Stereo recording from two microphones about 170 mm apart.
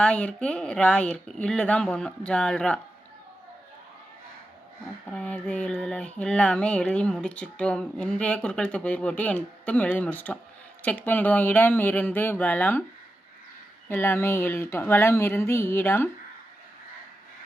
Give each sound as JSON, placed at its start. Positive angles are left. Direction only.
{"t": 0.0, "sound": "speech", "side_deg": 5}
{"t": 5.1, "sound": "speech", "side_deg": 5}
{"t": 13.8, "sound": "speech", "side_deg": 15}